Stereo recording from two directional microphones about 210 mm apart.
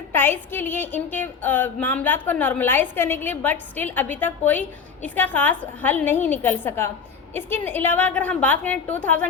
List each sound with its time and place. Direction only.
0.1 s speech: 10° left (ahead or behind)